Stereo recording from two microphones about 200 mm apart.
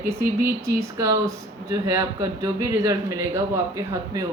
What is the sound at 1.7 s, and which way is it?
Speech, 15° right (ahead or behind).